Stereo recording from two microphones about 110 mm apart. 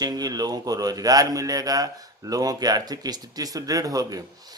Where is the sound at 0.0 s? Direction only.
35° right (ahead or behind).